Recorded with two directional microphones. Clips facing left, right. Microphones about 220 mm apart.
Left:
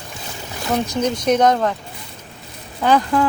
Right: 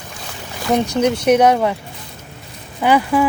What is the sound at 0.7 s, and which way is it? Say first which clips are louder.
Speech: right 4 dB; 10° right (ahead or behind).